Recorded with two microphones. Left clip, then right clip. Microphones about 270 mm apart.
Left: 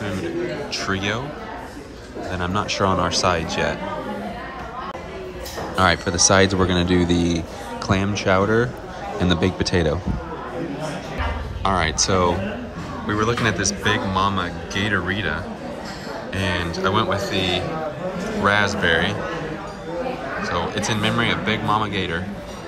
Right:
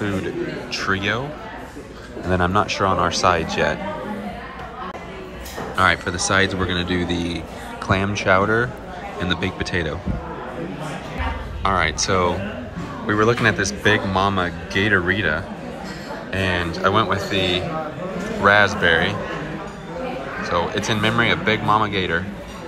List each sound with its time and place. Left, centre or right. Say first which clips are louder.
0.7 s speech: right 5 dB; centre
2.3 s speech: right 5 dB; centre
5.8 s speech: even; centre
11.6 s speech: right 1 dB; centre
20.4 s speech: right 3 dB; centre